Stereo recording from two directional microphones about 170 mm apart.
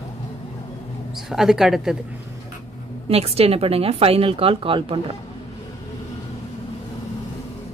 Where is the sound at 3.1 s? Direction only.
35° right (ahead or behind).